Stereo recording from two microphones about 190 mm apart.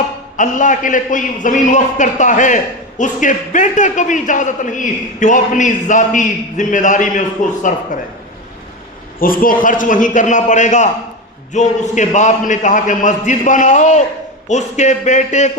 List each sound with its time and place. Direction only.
0.3 s a man's voice: 40° left (ahead or behind)
9.1 s a man's voice: 50° left (ahead or behind)